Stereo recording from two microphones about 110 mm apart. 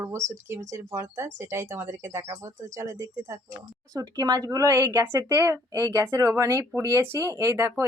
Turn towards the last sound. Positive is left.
turn(degrees=-25)  # may be behind; listen again after turning